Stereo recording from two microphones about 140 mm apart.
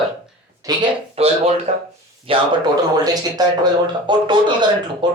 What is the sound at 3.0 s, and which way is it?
A man's voice, 30° right (ahead or behind).